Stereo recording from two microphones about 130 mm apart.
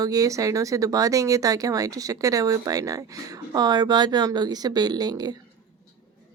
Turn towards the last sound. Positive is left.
turn(degrees=-30)  # may be behind; listen again after turning